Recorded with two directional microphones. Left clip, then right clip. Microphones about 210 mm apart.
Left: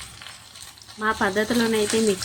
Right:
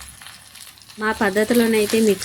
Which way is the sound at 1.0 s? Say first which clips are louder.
Right 3 dB; 15° right (ahead or behind).